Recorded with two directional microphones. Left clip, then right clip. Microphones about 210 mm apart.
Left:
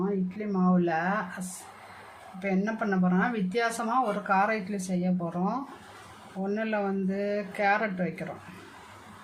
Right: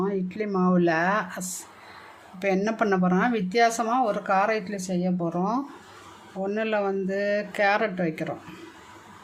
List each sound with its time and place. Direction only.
0.3 s speech: 45° right (ahead or behind)
2.4 s speech: 50° right (ahead or behind)